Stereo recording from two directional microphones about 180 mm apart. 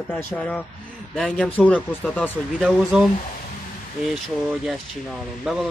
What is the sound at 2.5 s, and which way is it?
Speech, 5° right (ahead or behind).